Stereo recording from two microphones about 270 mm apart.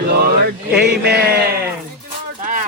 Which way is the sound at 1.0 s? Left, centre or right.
Right.